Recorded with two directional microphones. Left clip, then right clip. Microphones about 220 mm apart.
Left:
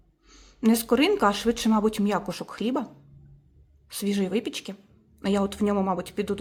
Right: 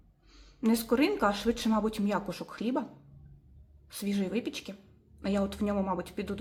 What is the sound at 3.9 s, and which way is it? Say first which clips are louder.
A woman's voice: left 7 dB; 40° left (ahead or behind).